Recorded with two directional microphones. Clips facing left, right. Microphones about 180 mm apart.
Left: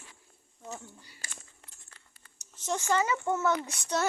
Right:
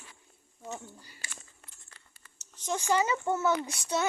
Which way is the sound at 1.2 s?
40° left (ahead or behind).